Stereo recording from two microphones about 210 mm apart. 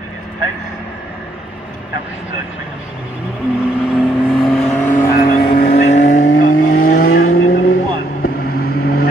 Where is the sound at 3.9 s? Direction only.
Centre (ahead or behind).